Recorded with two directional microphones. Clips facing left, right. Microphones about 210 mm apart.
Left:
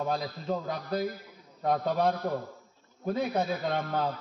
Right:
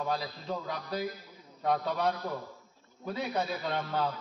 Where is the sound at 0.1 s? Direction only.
40° left (ahead or behind).